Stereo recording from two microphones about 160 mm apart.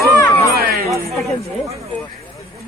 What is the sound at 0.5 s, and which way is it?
Chatter, 70° right (ahead or behind).